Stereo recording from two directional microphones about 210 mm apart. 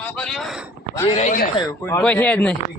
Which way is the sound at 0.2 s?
Centre (ahead or behind).